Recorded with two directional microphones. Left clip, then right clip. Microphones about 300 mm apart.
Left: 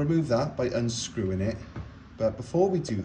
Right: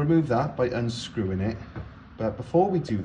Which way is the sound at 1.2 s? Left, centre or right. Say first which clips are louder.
Right 2 dB; right.